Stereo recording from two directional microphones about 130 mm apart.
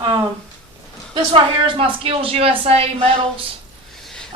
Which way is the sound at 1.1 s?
40° right (ahead or behind).